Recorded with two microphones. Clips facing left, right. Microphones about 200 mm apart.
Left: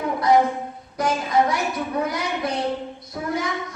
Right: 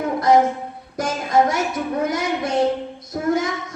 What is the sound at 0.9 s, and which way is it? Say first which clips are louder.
A woman's voice: right 2 dB; 45° right (ahead or behind).